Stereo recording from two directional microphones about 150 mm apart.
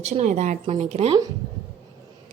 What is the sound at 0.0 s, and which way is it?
A woman's voice, 45° right (ahead or behind).